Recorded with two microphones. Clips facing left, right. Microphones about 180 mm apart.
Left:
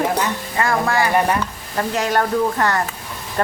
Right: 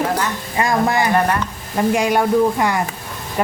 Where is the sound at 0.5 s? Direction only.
15° right (ahead or behind).